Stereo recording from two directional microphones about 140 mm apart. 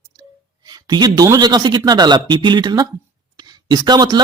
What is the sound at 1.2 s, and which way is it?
Speech, 30° right (ahead or behind).